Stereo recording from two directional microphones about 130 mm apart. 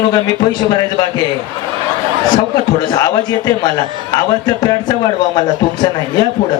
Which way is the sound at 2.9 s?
30° left (ahead or behind).